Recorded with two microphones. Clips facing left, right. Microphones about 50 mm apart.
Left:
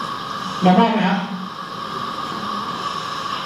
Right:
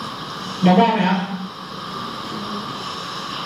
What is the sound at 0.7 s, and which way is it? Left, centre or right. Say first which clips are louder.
Speech: even; centre.